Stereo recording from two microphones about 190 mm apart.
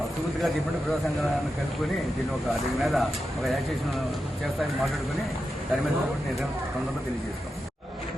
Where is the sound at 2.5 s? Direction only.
Centre (ahead or behind).